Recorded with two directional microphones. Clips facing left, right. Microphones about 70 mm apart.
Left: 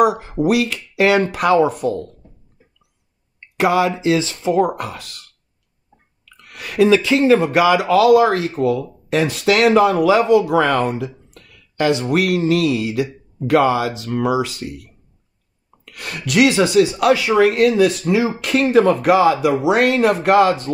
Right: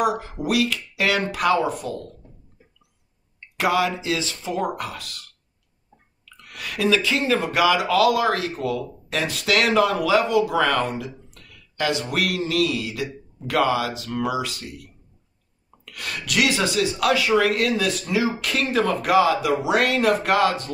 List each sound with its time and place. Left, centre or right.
0.5 s speech: left
3.5 s speech: left
6.2 s speech: left
15.8 s speech: left